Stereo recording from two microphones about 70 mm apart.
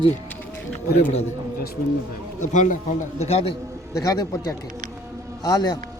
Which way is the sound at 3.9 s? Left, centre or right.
Left.